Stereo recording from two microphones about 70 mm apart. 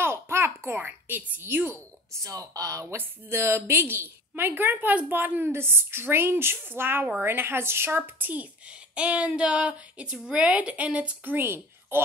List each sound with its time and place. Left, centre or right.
0.0 s a sound: right
1.3 s a woman's voice: right
2.2 s speech: right
3.0 s a woman's voice: right